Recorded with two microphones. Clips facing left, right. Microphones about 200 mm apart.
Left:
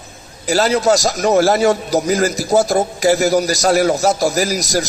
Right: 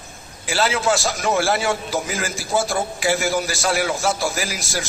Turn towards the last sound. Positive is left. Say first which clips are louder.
# left 9 dB
turn(degrees=40)  # may be behind; listen again after turning